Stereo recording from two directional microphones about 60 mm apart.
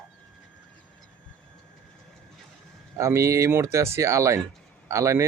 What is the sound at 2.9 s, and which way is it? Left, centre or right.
Speech, right.